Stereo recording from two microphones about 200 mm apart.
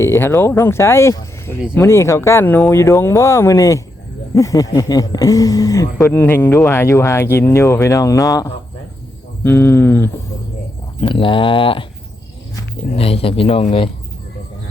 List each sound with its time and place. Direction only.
0.0 s speech: 15° left (ahead or behind)
11.0 s a man's voice: 25° left (ahead or behind)
12.9 s a man's voice: 30° left (ahead or behind)